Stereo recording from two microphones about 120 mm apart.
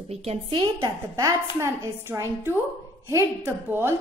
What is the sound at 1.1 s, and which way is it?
Speech, 25° right (ahead or behind).